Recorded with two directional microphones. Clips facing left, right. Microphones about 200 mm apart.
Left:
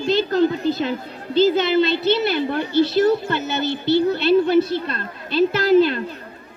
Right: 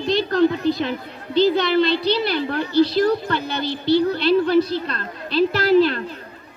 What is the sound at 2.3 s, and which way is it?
Speech, 20° left (ahead or behind).